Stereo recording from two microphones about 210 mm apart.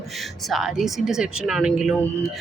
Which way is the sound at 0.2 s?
Centre (ahead or behind).